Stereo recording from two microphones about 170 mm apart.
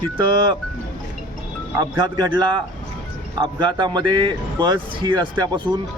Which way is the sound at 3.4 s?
25° right (ahead or behind).